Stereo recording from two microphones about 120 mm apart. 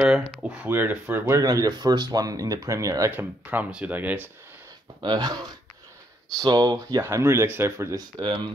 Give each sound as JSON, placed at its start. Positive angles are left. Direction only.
{"t": 0.0, "sound": "speech", "side_deg": -5}
{"t": 1.4, "sound": "speech", "side_deg": -30}
{"t": 3.1, "sound": "speech", "side_deg": -15}
{"t": 5.0, "sound": "speech", "side_deg": -35}
{"t": 7.0, "sound": "speech", "side_deg": -20}